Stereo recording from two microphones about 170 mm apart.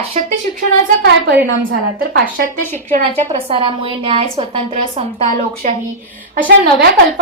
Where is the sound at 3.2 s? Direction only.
30° right (ahead or behind).